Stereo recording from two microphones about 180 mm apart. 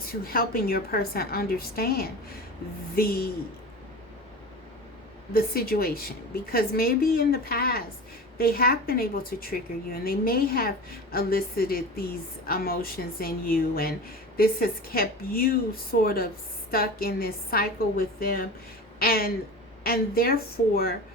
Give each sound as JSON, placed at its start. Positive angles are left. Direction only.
{"t": 0.3, "sound": "speech", "side_deg": 55}
{"t": 5.3, "sound": "speech", "side_deg": 55}